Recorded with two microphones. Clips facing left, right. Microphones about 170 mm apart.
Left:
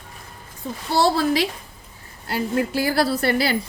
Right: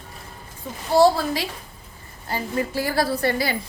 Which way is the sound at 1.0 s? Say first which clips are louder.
Right 2 dB; 75° left (ahead or behind).